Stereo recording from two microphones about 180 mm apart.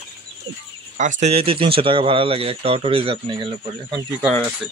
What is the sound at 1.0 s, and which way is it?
Speech, 40° right (ahead or behind).